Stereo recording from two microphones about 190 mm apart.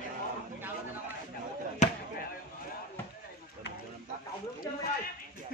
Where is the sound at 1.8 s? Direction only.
40° left (ahead or behind).